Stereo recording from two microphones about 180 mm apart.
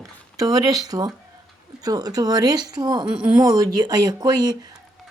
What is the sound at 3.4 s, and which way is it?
Speech, 20° right (ahead or behind).